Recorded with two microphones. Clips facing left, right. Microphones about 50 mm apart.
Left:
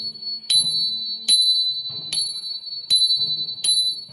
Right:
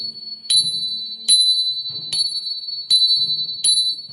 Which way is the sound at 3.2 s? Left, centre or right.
Centre.